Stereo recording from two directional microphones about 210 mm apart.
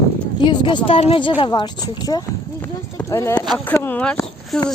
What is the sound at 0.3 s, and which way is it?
Speech, 20° left (ahead or behind).